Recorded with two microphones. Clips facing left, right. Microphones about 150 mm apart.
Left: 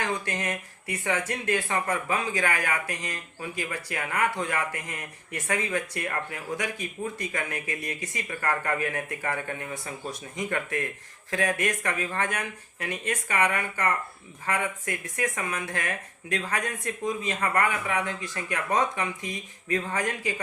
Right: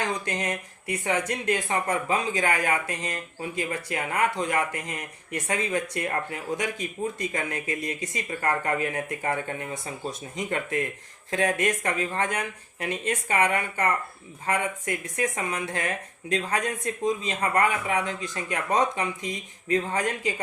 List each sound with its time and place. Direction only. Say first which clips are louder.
0.0 s speech: right 1 dB; 20° right (ahead or behind)